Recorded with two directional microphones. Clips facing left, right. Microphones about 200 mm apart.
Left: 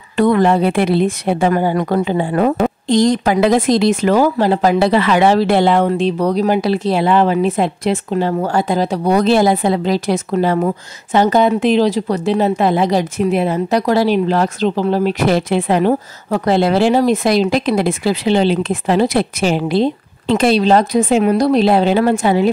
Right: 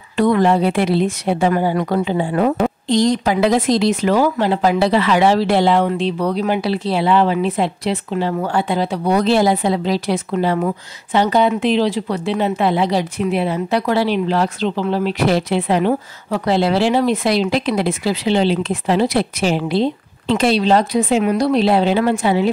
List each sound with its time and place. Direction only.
0.2 s speech: 55° left (ahead or behind)